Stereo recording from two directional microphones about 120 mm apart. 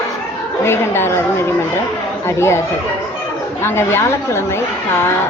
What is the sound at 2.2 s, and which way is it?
Speech, 20° left (ahead or behind).